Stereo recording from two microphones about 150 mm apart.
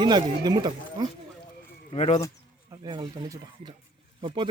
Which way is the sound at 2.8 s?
30° right (ahead or behind).